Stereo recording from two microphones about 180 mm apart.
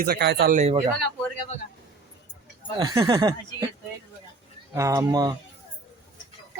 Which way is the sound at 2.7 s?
25° right (ahead or behind).